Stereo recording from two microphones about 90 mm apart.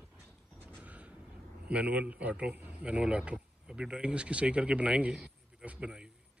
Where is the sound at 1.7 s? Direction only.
15° right (ahead or behind).